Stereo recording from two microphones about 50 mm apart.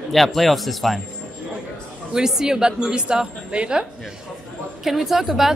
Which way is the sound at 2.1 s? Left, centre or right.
Centre.